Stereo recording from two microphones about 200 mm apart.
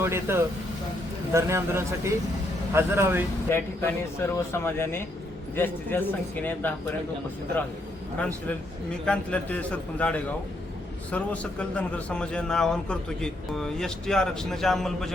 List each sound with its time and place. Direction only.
0.0 s speech: 10° right (ahead or behind)
3.5 s speech: 10° left (ahead or behind)
9.0 s a man's voice: 5° left (ahead or behind)